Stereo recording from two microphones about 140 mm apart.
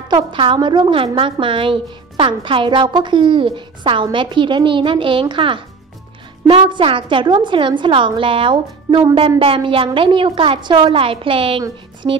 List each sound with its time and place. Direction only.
0.1 s a woman's voice: 35° right (ahead or behind)